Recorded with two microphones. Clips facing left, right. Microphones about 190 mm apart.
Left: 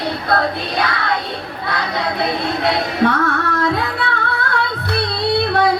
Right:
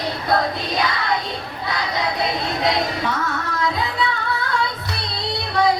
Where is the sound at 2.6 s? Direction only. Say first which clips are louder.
Left 5 dB; 60° left (ahead or behind).